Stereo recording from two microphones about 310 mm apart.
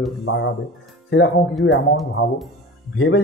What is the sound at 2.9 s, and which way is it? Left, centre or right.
Speech, left.